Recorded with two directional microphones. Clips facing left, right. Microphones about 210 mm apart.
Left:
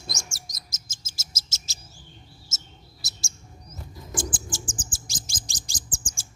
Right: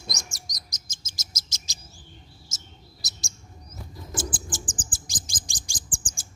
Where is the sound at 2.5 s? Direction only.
20° right (ahead or behind).